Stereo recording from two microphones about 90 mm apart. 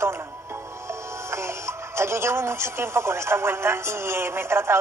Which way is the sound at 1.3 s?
30° right (ahead or behind).